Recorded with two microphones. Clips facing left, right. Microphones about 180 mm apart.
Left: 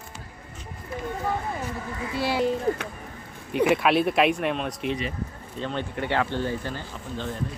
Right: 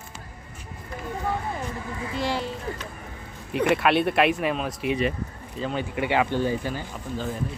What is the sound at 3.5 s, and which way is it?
Speech, centre (ahead or behind).